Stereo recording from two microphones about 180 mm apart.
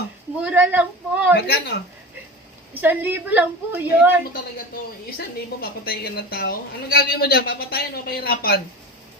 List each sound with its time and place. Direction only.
0.4 s a woman's voice: 10° right (ahead or behind)
1.4 s a woman's voice: 60° left (ahead or behind)
2.8 s a woman's voice: 10° right (ahead or behind)
5.1 s a woman's voice: 60° left (ahead or behind)